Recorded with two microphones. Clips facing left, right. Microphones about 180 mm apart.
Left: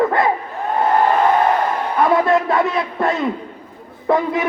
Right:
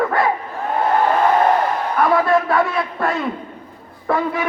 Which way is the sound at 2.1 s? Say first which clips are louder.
Even; 20° left (ahead or behind).